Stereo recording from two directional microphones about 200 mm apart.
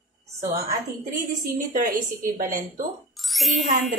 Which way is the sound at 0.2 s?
35° right (ahead or behind).